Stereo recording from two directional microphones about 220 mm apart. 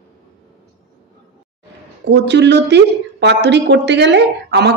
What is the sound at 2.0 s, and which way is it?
Speech, 50° right (ahead or behind).